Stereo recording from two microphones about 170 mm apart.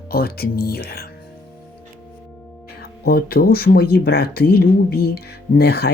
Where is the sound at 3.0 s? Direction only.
65° left (ahead or behind).